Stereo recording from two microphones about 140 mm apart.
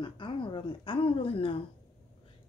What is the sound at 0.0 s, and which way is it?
Speech, 35° left (ahead or behind).